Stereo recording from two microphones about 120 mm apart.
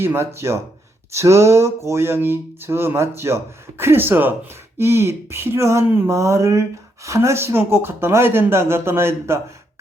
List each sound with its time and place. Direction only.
0.0 s speech: 20° right (ahead or behind)